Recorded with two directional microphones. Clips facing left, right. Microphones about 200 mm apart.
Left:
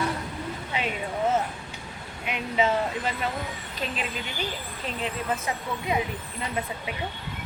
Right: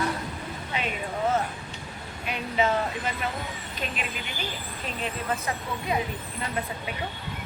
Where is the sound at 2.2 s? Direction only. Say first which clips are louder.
Left 1 dB; 25° left (ahead or behind).